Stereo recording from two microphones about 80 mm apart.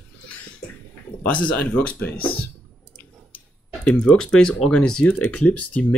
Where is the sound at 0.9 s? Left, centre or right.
Centre.